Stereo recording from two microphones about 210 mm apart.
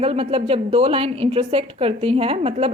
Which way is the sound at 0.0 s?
30° right (ahead or behind).